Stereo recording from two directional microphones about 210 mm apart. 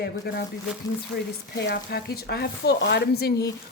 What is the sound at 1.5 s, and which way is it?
Speech, 50° left (ahead or behind).